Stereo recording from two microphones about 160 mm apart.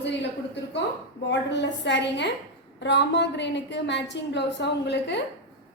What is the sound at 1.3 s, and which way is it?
A woman's voice, 90° left.